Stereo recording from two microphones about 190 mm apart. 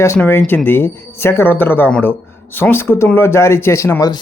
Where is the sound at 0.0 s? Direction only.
15° left (ahead or behind).